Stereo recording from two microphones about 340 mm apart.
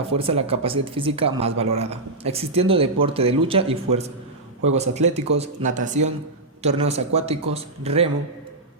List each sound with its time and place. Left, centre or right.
0.1 s speech: centre